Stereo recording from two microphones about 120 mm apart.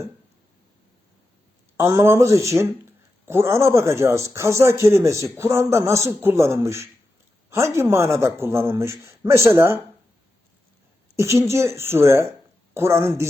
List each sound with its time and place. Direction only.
1.7 s speech: 25° right (ahead or behind)
11.2 s speech: 25° right (ahead or behind)